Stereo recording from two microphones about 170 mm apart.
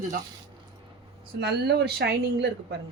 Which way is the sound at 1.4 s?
75° right (ahead or behind).